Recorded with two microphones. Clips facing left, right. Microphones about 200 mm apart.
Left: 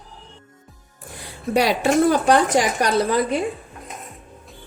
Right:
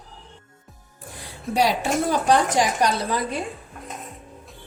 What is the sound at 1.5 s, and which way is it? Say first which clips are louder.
A woman's voice: left 4 dB; 65° left (ahead or behind).